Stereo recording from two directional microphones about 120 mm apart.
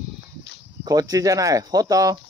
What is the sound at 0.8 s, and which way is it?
Speech, 30° right (ahead or behind).